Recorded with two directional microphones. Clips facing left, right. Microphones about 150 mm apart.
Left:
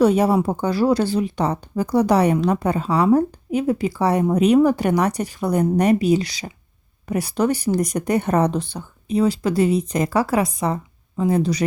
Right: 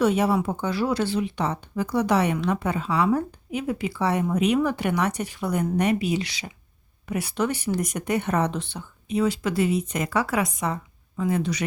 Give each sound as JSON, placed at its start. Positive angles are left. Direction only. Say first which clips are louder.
{"t": 0.0, "sound": "speech", "louder": "left 5 dB", "side_deg": 40}